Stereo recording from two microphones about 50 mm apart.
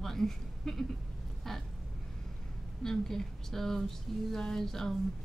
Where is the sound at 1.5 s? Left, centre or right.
Centre.